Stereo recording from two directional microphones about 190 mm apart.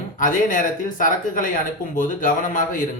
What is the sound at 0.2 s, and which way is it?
Speech, 45° left (ahead or behind).